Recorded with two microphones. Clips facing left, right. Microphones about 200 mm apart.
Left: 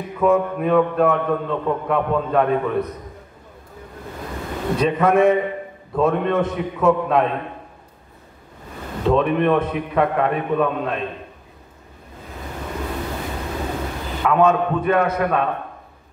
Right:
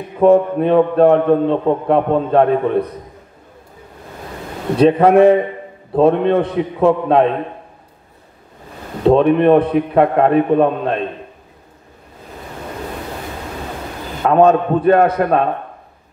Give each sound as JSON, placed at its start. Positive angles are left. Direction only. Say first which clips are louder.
{"t": 0.2, "sound": "a man's voice", "louder": "right 7 dB", "side_deg": -30}
{"t": 4.7, "sound": "a man's voice", "louder": "right 7 dB", "side_deg": -35}
{"t": 9.0, "sound": "a man's voice", "louder": "right 7 dB", "side_deg": -35}
{"t": 14.2, "sound": "a man's voice", "louder": "right 5 dB", "side_deg": -35}